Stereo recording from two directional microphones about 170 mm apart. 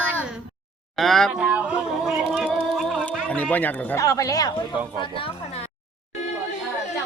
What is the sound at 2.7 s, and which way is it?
Speech, centre (ahead or behind).